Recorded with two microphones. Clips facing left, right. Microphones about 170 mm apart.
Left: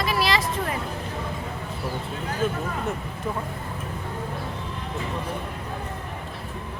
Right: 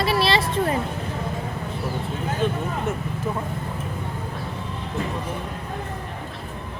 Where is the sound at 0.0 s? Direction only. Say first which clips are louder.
Right 3 dB; 30° right (ahead or behind).